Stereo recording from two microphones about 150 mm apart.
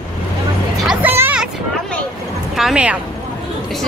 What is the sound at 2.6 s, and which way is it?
Speech, 5° right (ahead or behind).